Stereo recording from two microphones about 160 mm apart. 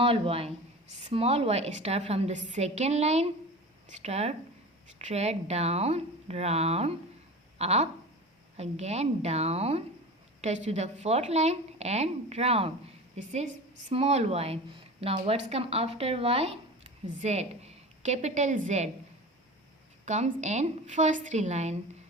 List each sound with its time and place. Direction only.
0.0 s a woman's voice: 35° right (ahead or behind)
13.9 s a woman's voice: 40° right (ahead or behind)
20.1 s a woman's voice: 50° right (ahead or behind)